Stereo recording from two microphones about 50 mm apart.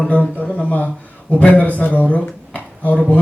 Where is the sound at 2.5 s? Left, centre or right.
Left.